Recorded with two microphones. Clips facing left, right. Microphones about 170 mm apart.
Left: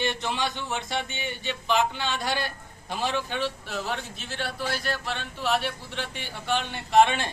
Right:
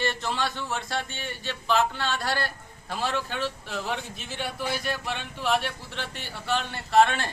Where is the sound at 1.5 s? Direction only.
20° left (ahead or behind).